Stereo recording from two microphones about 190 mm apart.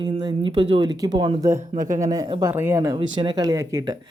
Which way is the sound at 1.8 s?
45° right (ahead or behind).